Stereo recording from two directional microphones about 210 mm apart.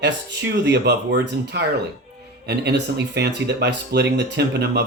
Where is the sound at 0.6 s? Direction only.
55° right (ahead or behind).